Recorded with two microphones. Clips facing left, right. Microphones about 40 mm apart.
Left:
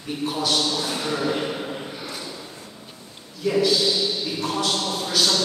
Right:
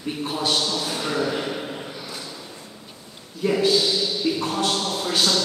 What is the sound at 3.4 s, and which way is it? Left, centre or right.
Speech, right.